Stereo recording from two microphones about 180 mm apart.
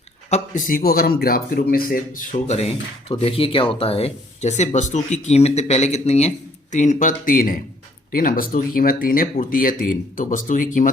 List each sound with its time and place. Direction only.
0.3 s a man's voice: 45° left (ahead or behind)